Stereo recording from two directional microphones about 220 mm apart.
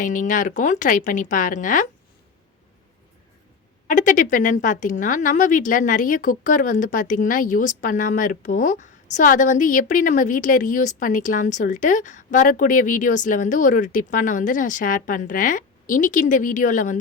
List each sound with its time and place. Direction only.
0.0 s speech: 35° left (ahead or behind)
3.8 s speech: 35° left (ahead or behind)